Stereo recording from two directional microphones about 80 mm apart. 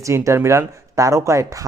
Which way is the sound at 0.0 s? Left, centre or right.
Right.